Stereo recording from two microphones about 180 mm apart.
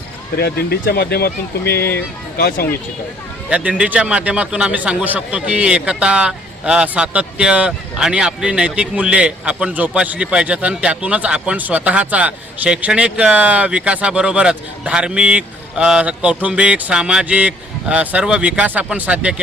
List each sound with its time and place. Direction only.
0.3 s speech: 60° left (ahead or behind)
1.7 s speech: 10° left (ahead or behind)
3.5 s a man's voice: 5° right (ahead or behind)